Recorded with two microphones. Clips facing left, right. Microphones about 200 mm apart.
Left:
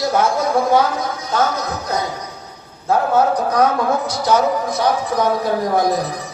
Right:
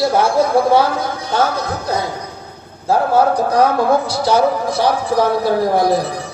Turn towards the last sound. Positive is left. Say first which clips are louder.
# right 2 dB
turn(degrees=-30)  # may be behind; listen again after turning